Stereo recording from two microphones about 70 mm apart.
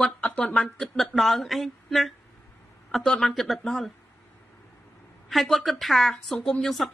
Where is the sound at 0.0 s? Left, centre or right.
Centre.